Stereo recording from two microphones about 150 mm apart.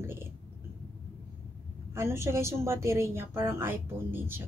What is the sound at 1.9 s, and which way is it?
A woman's voice, 20° right (ahead or behind).